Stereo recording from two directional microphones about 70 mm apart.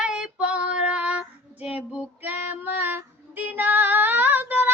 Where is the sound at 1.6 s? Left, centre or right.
Centre.